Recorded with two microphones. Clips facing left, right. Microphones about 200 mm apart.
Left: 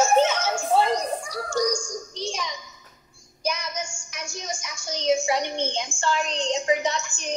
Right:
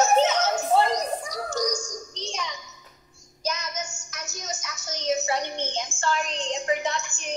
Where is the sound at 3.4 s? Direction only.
10° left (ahead or behind).